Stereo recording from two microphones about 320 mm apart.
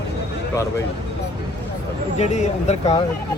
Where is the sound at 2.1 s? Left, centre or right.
Left.